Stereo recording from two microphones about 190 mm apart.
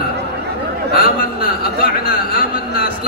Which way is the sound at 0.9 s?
50° left (ahead or behind).